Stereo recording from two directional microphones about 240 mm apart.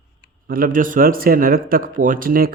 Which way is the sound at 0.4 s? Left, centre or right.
Right.